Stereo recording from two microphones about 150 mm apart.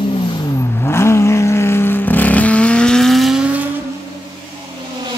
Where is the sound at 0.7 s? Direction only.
15° left (ahead or behind); by 3.4 s centre (ahead or behind).